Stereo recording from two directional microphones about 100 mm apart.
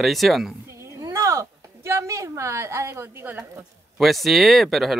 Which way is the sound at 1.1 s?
30° right (ahead or behind).